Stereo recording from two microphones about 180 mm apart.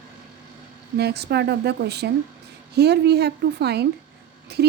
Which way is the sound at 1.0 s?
65° right (ahead or behind).